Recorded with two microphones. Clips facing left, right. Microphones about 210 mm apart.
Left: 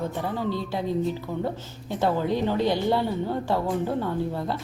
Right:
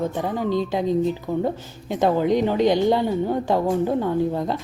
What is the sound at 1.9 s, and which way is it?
A woman's voice, 15° right (ahead or behind).